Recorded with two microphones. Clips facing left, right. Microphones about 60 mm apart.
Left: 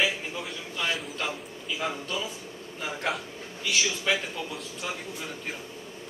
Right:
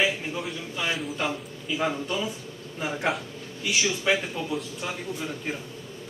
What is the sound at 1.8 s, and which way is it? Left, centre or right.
A man's voice, centre.